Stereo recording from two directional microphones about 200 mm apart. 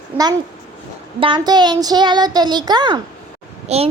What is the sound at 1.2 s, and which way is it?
A woman's voice, 25° right (ahead or behind).